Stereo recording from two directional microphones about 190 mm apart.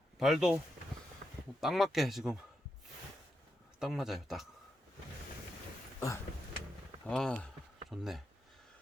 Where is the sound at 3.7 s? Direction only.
Centre (ahead or behind).